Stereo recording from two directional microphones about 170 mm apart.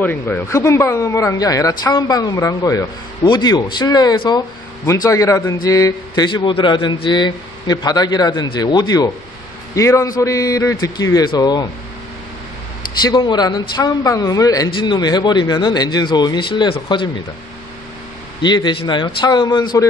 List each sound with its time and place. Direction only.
0.0 s a man's voice: 10° left (ahead or behind)
13.0 s a man's voice: 25° left (ahead or behind)
18.4 s a man's voice: 25° left (ahead or behind)